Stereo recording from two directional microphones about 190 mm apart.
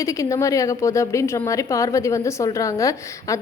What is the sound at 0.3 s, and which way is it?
A woman's voice, 15° left (ahead or behind).